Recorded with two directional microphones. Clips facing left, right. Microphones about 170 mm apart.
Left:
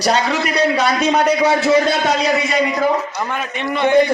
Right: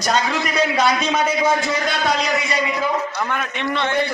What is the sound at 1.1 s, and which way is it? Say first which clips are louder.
Speech: left 4 dB; 70° left (ahead or behind).